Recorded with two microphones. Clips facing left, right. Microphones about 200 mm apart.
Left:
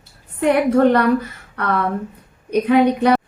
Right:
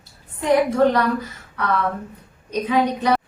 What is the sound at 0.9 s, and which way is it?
A woman's voice, 60° left (ahead or behind).